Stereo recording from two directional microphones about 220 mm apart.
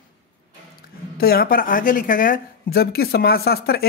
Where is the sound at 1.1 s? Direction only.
45° left (ahead or behind).